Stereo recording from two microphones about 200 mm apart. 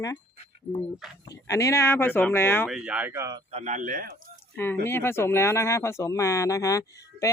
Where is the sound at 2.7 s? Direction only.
5° right (ahead or behind).